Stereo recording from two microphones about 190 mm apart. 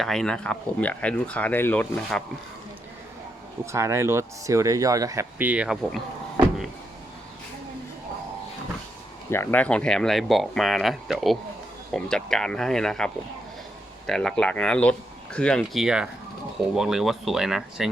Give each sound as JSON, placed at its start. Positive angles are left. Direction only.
{"t": 0.0, "sound": "speech", "side_deg": 0}
{"t": 3.7, "sound": "speech", "side_deg": -15}
{"t": 9.3, "sound": "speech", "side_deg": 10}
{"t": 14.1, "sound": "speech", "side_deg": 5}